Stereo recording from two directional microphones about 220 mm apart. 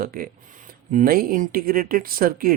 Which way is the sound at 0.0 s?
40° right (ahead or behind).